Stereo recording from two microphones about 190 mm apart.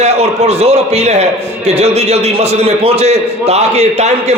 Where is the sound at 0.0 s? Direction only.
35° right (ahead or behind).